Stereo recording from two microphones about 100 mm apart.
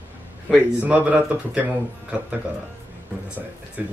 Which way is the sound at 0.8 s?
15° right (ahead or behind).